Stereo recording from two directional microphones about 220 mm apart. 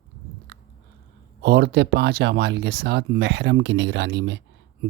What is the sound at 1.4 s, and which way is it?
Speech, 50° right (ahead or behind).